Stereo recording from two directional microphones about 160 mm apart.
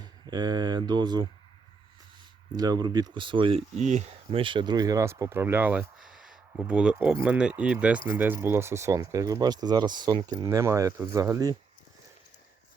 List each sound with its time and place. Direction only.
0.0 s speech: 25° right (ahead or behind)
2.5 s speech: 25° right (ahead or behind)
3.8 s speech: 45° right (ahead or behind); by 11.5 s 20° right (ahead or behind)